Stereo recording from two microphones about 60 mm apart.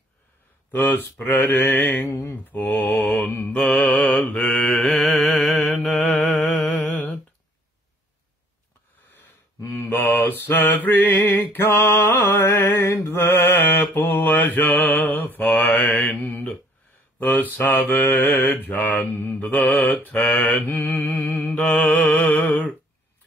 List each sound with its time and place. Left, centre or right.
0.7 s mantra: left
4.2 s mantra: centre
5.9 s music: left
9.8 s mantra: left